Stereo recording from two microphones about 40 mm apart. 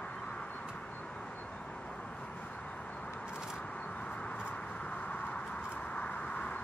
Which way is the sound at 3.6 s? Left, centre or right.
Left.